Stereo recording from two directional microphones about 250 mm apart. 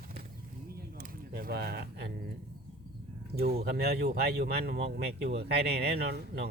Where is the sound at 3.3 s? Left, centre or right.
Right.